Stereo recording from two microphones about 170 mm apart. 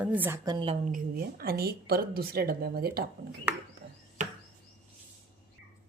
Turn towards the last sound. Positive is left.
turn(degrees=-50)  # may be behind; listen again after turning